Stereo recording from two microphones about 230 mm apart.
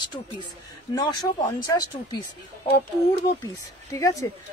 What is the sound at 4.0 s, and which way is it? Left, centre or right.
Speech, centre.